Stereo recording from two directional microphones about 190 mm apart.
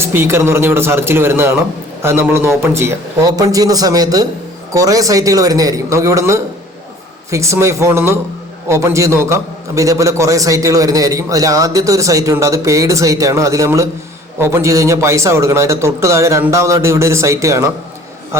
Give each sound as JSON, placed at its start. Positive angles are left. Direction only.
{"t": 0.0, "sound": "a man's voice", "side_deg": -10}